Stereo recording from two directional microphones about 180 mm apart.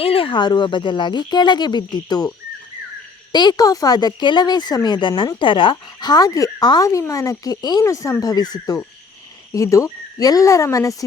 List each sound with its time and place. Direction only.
0.0 s speech: 30° left (ahead or behind)
3.3 s speech: 20° left (ahead or behind)